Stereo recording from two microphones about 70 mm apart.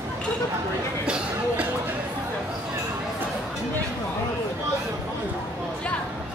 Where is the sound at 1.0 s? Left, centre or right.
Centre.